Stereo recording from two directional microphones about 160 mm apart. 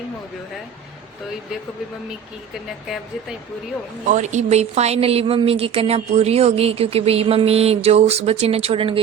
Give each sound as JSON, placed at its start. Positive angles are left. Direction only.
{"t": 4.1, "sound": "speech", "side_deg": -50}